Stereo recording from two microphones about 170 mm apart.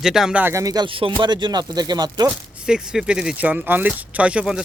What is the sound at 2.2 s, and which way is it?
Speech, 5° right (ahead or behind).